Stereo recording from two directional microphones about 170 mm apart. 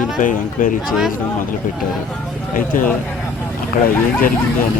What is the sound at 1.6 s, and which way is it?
Speech, 50° left (ahead or behind).